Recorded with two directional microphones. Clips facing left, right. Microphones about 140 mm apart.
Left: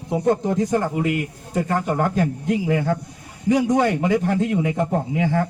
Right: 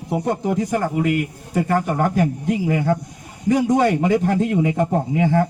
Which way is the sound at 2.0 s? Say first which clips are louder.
Right 2 dB; 15° right (ahead or behind).